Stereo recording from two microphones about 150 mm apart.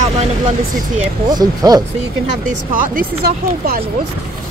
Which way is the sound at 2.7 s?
70° right (ahead or behind).